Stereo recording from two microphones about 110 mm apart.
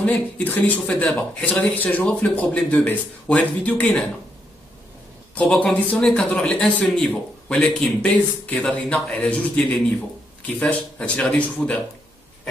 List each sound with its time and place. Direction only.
0.0 s a man's voice: 15° left (ahead or behind)
5.3 s a man's voice: 10° left (ahead or behind)